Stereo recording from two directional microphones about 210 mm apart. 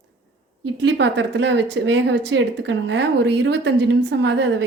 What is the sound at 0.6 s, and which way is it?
A woman's voice, 55° right (ahead or behind).